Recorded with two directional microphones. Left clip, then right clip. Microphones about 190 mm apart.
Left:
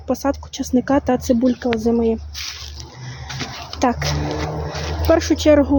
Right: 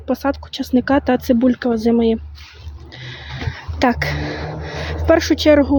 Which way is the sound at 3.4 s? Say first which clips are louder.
Right 2 dB; 20° right (ahead or behind).